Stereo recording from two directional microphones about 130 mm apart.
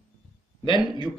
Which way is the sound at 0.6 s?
40° left (ahead or behind).